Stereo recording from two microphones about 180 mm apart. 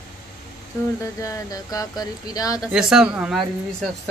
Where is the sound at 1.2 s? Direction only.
20° left (ahead or behind).